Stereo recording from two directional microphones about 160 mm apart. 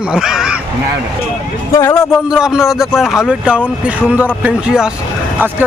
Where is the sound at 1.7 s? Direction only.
20° left (ahead or behind).